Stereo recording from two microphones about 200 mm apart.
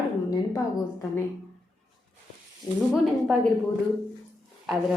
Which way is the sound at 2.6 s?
20° left (ahead or behind).